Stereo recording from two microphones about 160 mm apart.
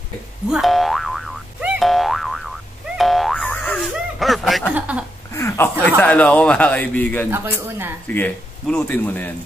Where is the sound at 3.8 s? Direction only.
Centre (ahead or behind).